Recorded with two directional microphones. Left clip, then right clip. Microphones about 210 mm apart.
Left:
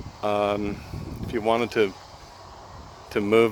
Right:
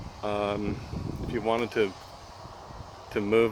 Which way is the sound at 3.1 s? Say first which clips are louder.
Left 4 dB; 35° left (ahead or behind).